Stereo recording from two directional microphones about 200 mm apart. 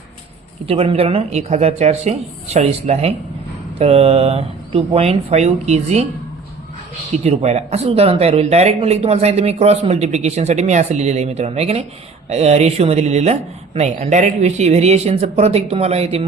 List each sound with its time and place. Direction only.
0.6 s speech: 30° right (ahead or behind)
7.3 s speech: 35° right (ahead or behind)